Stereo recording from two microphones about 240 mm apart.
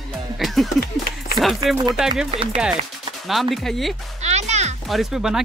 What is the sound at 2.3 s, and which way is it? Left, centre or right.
Speech, right.